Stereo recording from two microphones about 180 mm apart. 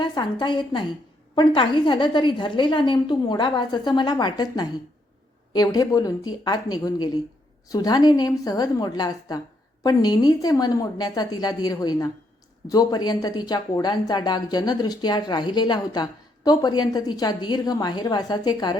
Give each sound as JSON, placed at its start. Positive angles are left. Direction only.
{"t": 0.0, "sound": "a woman's voice", "side_deg": 25}